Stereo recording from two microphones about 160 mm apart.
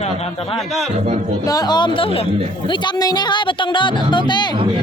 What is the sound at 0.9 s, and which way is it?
Speech, 45° right (ahead or behind).